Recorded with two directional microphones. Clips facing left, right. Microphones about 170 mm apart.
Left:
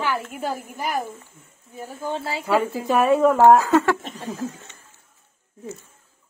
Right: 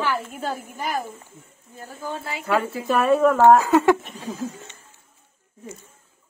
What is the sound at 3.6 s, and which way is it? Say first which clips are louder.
Speech: right 2 dB; 15° right (ahead or behind).